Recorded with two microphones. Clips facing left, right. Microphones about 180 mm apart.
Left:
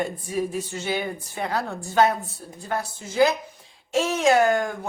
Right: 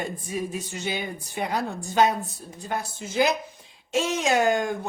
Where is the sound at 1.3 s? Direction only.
15° right (ahead or behind).